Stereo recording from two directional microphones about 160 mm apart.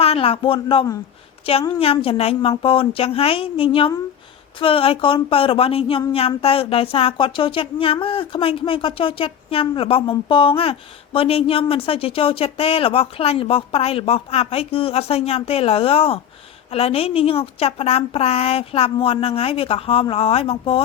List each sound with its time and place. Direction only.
0.0 s speech: 35° left (ahead or behind)